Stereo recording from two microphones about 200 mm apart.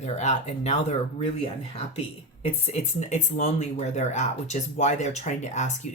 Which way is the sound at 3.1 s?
35° left (ahead or behind).